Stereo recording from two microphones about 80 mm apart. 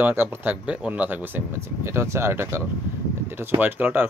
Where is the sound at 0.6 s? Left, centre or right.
Centre; by 2.6 s right.